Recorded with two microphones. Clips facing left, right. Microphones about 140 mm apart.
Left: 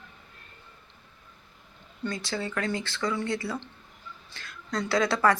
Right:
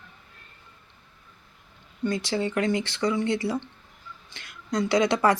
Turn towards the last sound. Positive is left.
turn(degrees=-20)  # may be behind; listen again after turning